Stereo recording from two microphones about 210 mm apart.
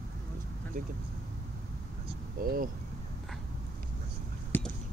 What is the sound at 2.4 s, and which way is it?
Speech, 40° right (ahead or behind).